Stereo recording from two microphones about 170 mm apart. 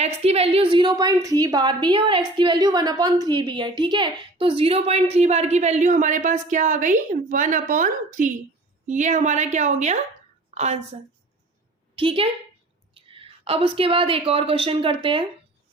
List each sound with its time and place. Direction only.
0.0 s a woman's voice: 35° right (ahead or behind)
11.9 s a woman's voice: 30° right (ahead or behind)